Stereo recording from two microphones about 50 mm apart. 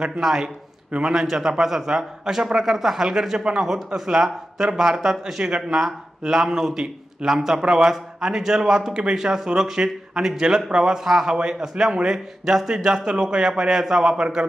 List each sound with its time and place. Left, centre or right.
0.2 s speech: centre
0.9 s a man's voice: right
1.1 s speech: centre